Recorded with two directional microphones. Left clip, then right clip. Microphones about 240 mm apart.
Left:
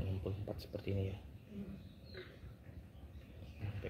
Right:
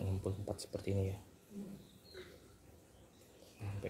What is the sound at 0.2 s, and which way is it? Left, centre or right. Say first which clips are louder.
Speech: right 3 dB; right.